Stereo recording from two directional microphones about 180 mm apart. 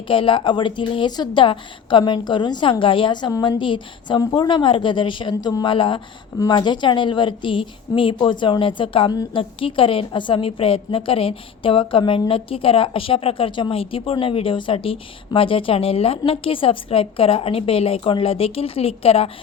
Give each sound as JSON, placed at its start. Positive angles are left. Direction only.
{"t": 0.1, "sound": "a woman's voice", "side_deg": 30}